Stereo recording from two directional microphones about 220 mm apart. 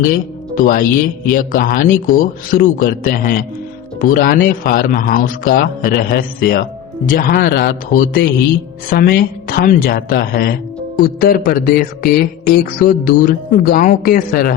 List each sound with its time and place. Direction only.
0.0 s speech: 40° left (ahead or behind)